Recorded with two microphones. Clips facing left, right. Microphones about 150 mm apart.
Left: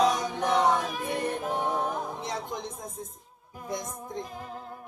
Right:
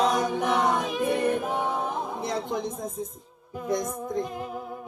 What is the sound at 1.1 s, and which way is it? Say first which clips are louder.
Music: right 4 dB; 60° right (ahead or behind).